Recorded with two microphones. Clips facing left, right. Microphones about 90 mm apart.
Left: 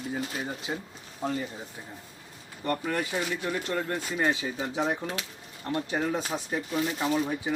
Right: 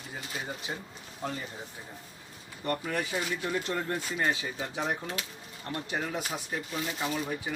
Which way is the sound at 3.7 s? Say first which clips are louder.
Left 3 dB; 10° right (ahead or behind).